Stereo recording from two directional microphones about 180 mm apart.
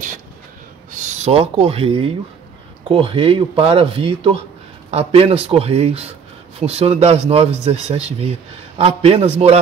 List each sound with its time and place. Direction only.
0.9 s a man's voice: 40° right (ahead or behind)